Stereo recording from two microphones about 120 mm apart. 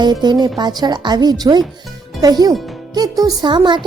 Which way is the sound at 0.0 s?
40° right (ahead or behind).